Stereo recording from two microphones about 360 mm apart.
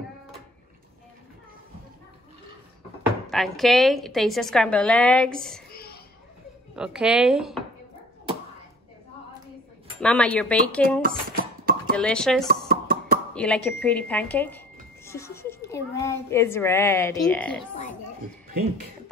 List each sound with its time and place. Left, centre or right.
3.3 s a woman's voice: centre
5.7 s a sound: left
6.7 s a woman's voice: centre
9.9 s a woman's voice: centre
11.0 s dishes: right
12.0 s a woman's voice: centre
12.4 s a sound: right
13.3 s a woman's voice: centre